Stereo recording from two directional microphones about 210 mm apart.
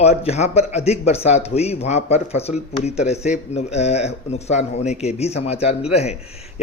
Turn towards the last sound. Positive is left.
turn(degrees=30)  # may be behind; listen again after turning